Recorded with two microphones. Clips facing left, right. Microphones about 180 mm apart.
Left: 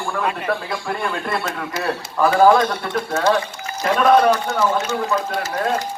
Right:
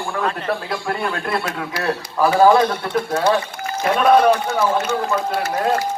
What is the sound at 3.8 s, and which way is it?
Speech, 5° right (ahead or behind).